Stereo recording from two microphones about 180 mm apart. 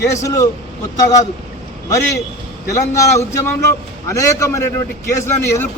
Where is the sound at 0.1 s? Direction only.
15° left (ahead or behind).